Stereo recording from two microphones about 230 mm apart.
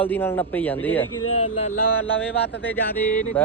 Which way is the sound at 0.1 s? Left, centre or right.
Centre.